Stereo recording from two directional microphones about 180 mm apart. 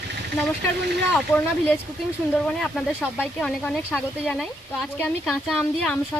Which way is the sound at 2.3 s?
5° left (ahead or behind).